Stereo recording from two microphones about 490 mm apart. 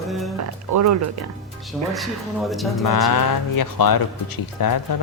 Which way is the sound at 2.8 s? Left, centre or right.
Left.